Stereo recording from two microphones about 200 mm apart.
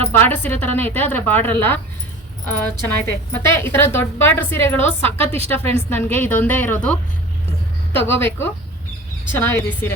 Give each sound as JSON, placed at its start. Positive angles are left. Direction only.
{"t": 0.1, "sound": "a woman's voice", "side_deg": 10}
{"t": 5.0, "sound": "a woman's voice", "side_deg": -30}
{"t": 5.9, "sound": "a woman's voice", "side_deg": 10}
{"t": 7.9, "sound": "a woman's voice", "side_deg": 10}
{"t": 9.4, "sound": "a woman's voice", "side_deg": 10}